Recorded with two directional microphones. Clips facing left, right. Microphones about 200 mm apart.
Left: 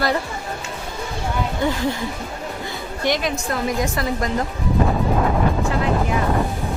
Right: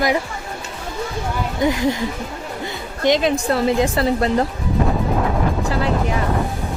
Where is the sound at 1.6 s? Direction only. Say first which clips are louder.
Right 4 dB; 15° right (ahead or behind).